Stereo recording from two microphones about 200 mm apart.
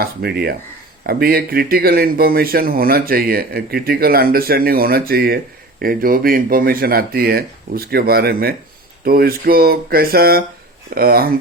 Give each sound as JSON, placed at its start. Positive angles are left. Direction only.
{"t": 0.0, "sound": "speech", "side_deg": -50}